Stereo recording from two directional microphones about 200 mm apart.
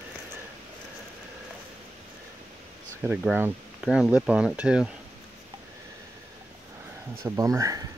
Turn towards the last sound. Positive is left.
turn(degrees=-15)  # may be behind; listen again after turning